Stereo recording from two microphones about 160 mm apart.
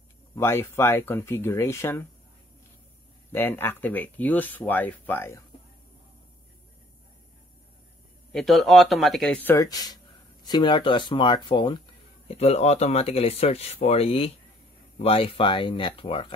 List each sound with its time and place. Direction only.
0.4 s speech: 15° left (ahead or behind)
3.3 s speech: 15° left (ahead or behind)
8.3 s speech: centre (ahead or behind); by 16.3 s 35° left (ahead or behind)